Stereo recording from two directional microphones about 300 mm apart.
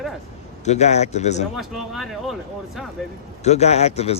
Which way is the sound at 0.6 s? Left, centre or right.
Left.